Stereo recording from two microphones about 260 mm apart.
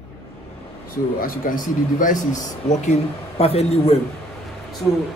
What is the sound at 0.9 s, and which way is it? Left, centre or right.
Speech, left.